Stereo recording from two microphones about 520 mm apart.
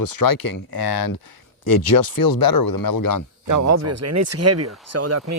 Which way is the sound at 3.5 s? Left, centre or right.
Right.